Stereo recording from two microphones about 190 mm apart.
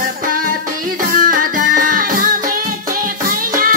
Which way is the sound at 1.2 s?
45° right (ahead or behind).